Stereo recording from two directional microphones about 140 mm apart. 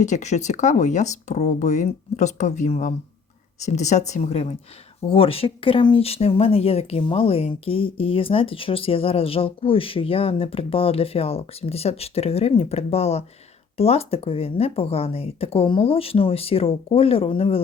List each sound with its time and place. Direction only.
0.0 s speech: 55° left (ahead or behind); by 17.6 s 40° left (ahead or behind)